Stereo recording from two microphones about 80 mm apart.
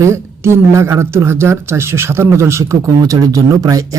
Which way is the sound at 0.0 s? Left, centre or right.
Right.